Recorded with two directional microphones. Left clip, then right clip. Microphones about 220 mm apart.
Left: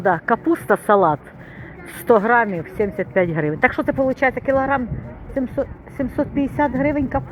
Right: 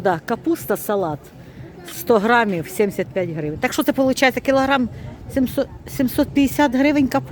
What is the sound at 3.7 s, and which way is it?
Speech, 30° right (ahead or behind).